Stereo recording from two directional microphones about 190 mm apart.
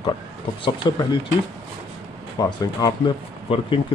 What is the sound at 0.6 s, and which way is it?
Speech, 25° left (ahead or behind).